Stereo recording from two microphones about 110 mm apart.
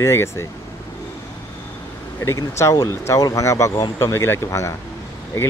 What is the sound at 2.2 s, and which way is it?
Speech, 25° left (ahead or behind).